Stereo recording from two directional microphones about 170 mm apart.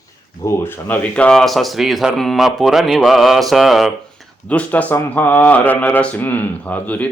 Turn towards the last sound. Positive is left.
turn(degrees=10)  # may be behind; listen again after turning